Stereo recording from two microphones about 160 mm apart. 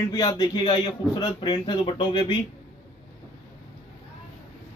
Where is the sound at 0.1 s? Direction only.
20° left (ahead or behind).